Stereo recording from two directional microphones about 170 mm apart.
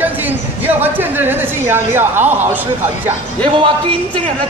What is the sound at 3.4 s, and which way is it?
Speech, 30° right (ahead or behind).